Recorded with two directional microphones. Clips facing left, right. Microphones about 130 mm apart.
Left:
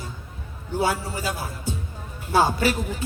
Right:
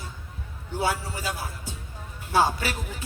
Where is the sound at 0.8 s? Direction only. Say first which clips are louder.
Left 3 dB; 40° left (ahead or behind).